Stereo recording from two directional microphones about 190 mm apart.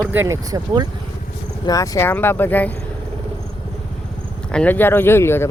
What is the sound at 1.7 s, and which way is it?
Speech, 15° left (ahead or behind).